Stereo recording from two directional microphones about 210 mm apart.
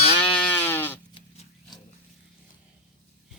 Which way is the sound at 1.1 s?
25° left (ahead or behind).